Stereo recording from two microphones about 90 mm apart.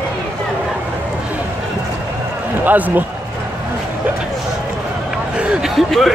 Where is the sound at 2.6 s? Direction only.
20° right (ahead or behind).